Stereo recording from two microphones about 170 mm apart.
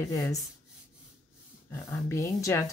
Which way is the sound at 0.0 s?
20° left (ahead or behind).